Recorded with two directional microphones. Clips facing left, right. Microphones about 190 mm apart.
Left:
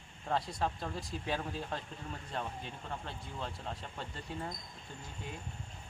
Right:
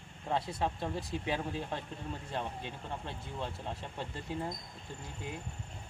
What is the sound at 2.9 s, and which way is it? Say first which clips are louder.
Speech: even; 20° right (ahead or behind).